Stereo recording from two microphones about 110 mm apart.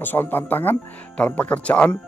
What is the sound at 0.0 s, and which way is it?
A man's voice, 20° left (ahead or behind).